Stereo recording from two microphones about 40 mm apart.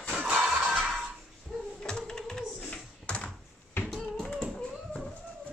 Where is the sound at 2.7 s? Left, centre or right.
Left.